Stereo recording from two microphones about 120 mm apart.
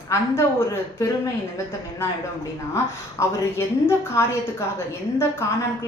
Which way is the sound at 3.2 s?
25° left (ahead or behind).